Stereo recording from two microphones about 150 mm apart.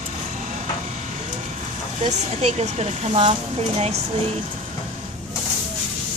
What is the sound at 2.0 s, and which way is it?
Speech, 45° right (ahead or behind).